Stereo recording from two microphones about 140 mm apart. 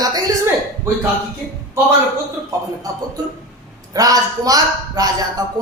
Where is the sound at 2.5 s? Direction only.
25° right (ahead or behind).